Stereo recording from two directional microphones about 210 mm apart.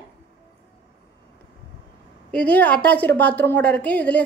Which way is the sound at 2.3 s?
5° left (ahead or behind).